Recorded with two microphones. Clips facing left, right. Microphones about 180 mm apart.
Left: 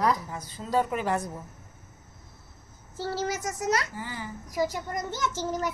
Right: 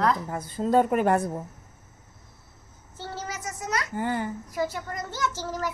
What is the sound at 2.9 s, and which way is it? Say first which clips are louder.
Speech: left 5 dB; 35° left (ahead or behind).